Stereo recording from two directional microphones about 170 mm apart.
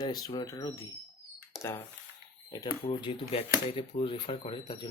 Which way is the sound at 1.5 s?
Centre (ahead or behind).